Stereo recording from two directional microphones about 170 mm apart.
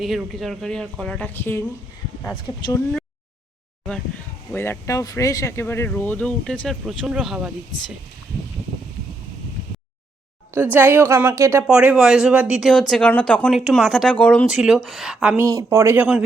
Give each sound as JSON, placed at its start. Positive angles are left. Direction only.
{"t": 0.3, "sound": "speech", "side_deg": 0}
{"t": 2.5, "sound": "speech", "side_deg": 25}
{"t": 4.5, "sound": "speech", "side_deg": 15}
{"t": 10.5, "sound": "a woman's voice", "side_deg": -10}
{"t": 15.4, "sound": "a woman's voice", "side_deg": -20}